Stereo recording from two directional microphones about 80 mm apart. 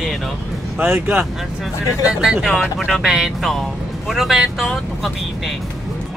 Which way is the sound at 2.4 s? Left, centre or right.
Centre.